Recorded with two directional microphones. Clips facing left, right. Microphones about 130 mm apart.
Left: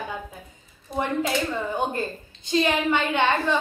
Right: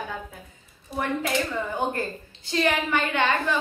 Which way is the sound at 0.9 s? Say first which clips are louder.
Left 2 dB; 20° left (ahead or behind).